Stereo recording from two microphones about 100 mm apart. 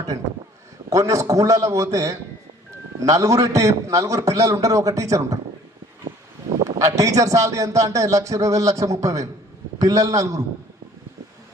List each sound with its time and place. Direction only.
0.9 s a man's voice: 35° right (ahead or behind)
6.6 s a man's voice: 35° right (ahead or behind)